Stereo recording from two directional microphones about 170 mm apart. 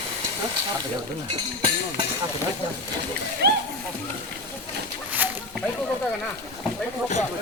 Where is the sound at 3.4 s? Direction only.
75° right (ahead or behind).